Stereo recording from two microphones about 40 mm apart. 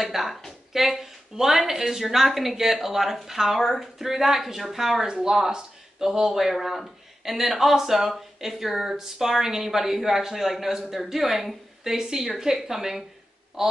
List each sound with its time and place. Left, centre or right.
0.0 s a woman's voice: centre
5.0 s speech: centre